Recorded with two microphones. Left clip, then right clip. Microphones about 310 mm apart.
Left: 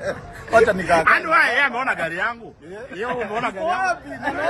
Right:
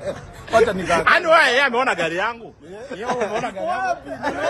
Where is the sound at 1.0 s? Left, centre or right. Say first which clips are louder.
Right 5 dB; right.